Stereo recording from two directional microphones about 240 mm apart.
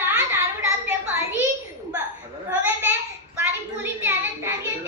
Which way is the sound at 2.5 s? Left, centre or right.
Centre.